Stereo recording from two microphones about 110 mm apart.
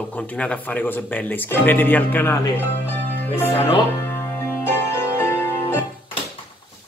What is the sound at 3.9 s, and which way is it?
Music, 20° left (ahead or behind).